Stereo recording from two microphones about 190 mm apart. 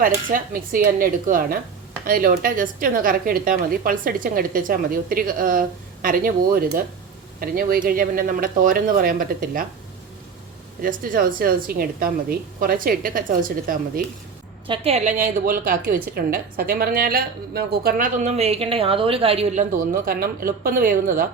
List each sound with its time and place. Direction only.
0.0 s a woman's voice: 45° right (ahead or behind)
10.8 s a woman's voice: 45° right (ahead or behind)
14.7 s a woman's voice: 35° right (ahead or behind)
15.4 s a woman's voice: 50° right (ahead or behind)